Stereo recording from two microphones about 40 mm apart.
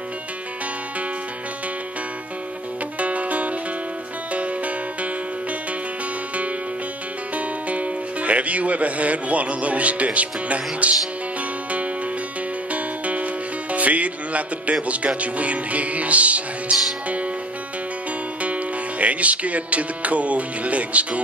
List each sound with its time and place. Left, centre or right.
3.0 s music: right
7.3 s speech: right
12.7 s speech: right
18.4 s music: right